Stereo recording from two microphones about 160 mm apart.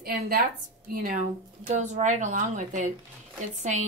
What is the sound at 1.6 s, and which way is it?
A woman's voice, 45° right (ahead or behind).